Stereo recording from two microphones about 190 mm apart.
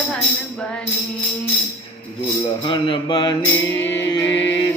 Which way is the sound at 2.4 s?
25° left (ahead or behind).